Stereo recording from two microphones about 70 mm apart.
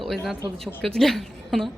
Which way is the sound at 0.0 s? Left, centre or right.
Centre.